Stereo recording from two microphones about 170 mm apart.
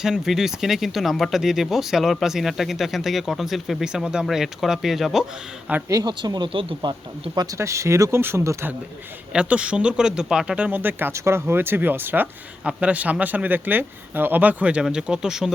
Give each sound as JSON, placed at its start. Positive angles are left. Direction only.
{"t": 0.0, "sound": "speech", "side_deg": -5}
{"t": 5.9, "sound": "speech", "side_deg": -25}
{"t": 7.3, "sound": "speech", "side_deg": -20}